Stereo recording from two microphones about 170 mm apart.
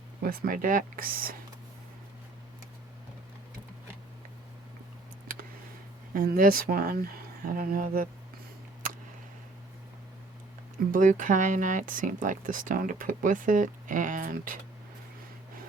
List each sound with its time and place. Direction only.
0.2 s speech: 55° right (ahead or behind)
5.3 s a sound: 55° right (ahead or behind)
6.1 s speech: 55° right (ahead or behind)
10.9 s speech: 50° right (ahead or behind)